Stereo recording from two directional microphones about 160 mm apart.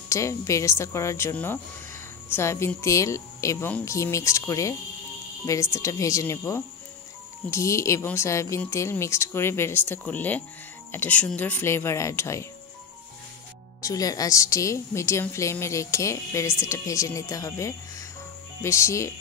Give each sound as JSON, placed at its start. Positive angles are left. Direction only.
{"t": 0.1, "sound": "a woman's voice", "side_deg": 20}
{"t": 13.7, "sound": "a woman's voice", "side_deg": 20}